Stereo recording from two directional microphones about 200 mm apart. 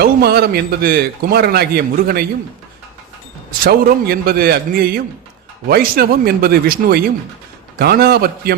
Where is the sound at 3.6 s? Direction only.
50° right (ahead or behind).